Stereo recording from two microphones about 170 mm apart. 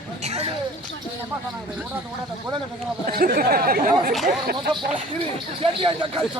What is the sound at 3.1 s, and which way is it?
Speech, 60° right (ahead or behind).